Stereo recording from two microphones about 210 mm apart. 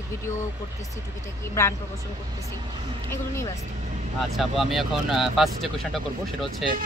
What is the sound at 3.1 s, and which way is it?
Speech, 10° left (ahead or behind).